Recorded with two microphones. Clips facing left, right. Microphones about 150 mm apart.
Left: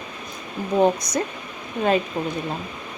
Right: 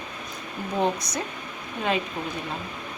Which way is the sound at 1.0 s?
45° left (ahead or behind).